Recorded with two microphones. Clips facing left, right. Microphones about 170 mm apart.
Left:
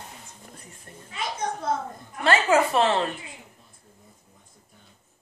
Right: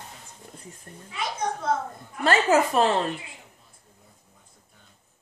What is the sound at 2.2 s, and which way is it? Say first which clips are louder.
Speech: even; 40° right (ahead or behind).